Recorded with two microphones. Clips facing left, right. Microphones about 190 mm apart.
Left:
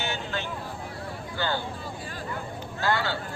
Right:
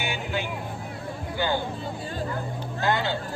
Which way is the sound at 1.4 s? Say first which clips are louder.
Right 3 dB; 15° right (ahead or behind).